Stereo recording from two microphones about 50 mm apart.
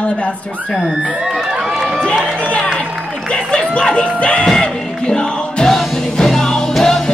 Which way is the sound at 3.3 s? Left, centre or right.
Centre.